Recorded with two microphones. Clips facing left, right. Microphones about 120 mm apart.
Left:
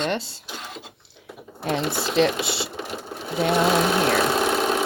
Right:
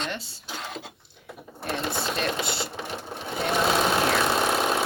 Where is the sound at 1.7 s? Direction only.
90° left.